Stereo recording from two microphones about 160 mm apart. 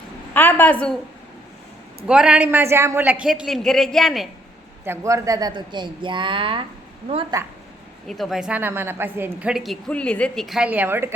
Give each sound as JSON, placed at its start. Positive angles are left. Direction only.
{"t": 0.3, "sound": "a woman's voice", "side_deg": 10}
{"t": 2.0, "sound": "a woman's voice", "side_deg": -5}
{"t": 4.9, "sound": "speech", "side_deg": -20}
{"t": 7.3, "sound": "speech", "side_deg": -25}
{"t": 8.0, "sound": "a woman's voice", "side_deg": 0}